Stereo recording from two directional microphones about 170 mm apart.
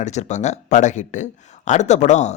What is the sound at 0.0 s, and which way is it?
Speech, 45° left (ahead or behind).